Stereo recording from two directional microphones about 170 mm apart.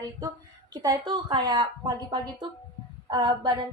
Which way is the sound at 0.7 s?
25° right (ahead or behind).